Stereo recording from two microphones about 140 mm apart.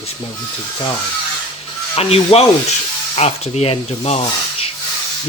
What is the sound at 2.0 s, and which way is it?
Speech, 45° left (ahead or behind).